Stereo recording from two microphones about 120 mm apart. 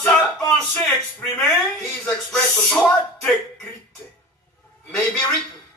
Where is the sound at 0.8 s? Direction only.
20° left (ahead or behind).